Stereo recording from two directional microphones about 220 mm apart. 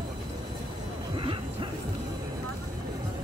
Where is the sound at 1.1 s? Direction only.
20° right (ahead or behind).